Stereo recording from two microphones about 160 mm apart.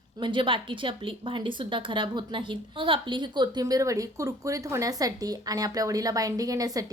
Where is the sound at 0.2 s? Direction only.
30° right (ahead or behind).